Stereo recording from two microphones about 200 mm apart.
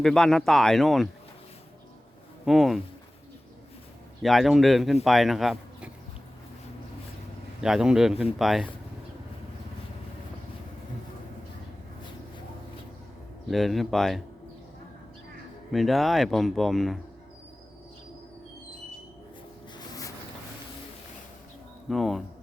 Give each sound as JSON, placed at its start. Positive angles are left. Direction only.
{"t": 0.0, "sound": "speech", "side_deg": 0}
{"t": 2.4, "sound": "speech", "side_deg": 0}
{"t": 4.2, "sound": "speech", "side_deg": 0}
{"t": 7.6, "sound": "speech", "side_deg": -5}
{"t": 13.5, "sound": "speech", "side_deg": 0}
{"t": 15.7, "sound": "speech", "side_deg": 0}
{"t": 19.7, "sound": "a sound", "side_deg": 15}
{"t": 21.8, "sound": "speech", "side_deg": 0}